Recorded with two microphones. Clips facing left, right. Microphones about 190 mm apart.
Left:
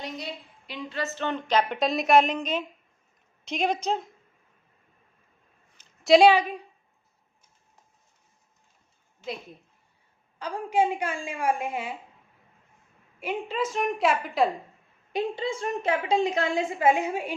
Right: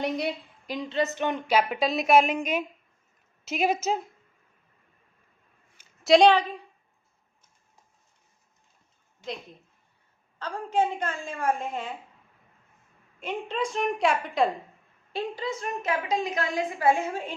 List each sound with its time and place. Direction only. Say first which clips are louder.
0.9 s a woman's voice: right 3 dB; 20° right (ahead or behind)
5.7 s a sound: left 1 dB; centre (ahead or behind)
10.3 s a woman's voice: left 1 dB; 15° left (ahead or behind)
13.1 s a woman's voice: left 1 dB; 5° left (ahead or behind)
15.1 s a woman's voice: left 3 dB; 25° left (ahead or behind)